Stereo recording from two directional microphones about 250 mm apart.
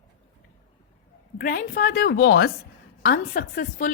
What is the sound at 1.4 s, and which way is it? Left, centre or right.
A woman's voice, left.